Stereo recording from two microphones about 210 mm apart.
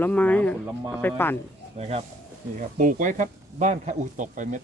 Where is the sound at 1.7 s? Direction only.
30° right (ahead or behind).